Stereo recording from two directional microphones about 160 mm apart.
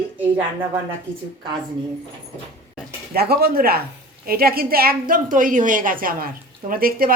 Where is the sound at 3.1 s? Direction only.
75° right (ahead or behind).